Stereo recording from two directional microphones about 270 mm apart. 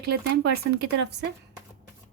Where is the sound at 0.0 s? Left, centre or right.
Right.